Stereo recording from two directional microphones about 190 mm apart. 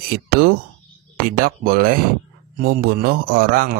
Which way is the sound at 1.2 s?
50° right (ahead or behind).